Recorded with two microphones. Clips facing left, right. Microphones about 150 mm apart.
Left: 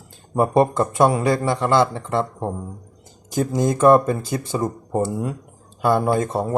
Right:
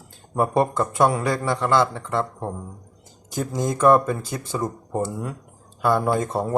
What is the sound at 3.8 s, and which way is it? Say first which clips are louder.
Speech: left 2 dB; 30° left (ahead or behind).